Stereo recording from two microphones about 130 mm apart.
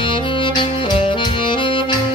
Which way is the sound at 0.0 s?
40° left (ahead or behind).